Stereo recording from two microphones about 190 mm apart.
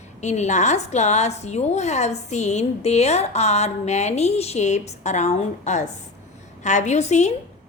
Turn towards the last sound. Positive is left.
turn(degrees=35)  # may be behind; listen again after turning